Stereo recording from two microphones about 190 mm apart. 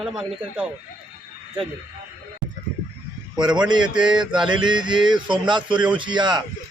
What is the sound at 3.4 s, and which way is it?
A man's voice, 25° right (ahead or behind).